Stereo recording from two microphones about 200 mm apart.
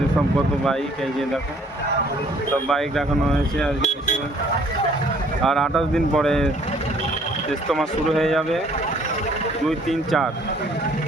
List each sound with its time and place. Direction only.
2.6 s speech: centre (ahead or behind)
3.8 s speech: 35° left (ahead or behind)
5.4 s speech: centre (ahead or behind)
7.7 s speech: centre (ahead or behind)
9.6 s speech: centre (ahead or behind)